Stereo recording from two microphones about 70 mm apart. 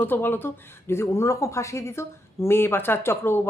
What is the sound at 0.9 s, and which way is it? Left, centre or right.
Speech, left.